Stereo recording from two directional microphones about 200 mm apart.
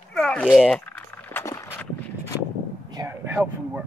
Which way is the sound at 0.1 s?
5° left (ahead or behind).